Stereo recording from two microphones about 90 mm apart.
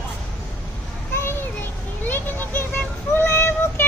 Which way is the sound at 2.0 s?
20° left (ahead or behind).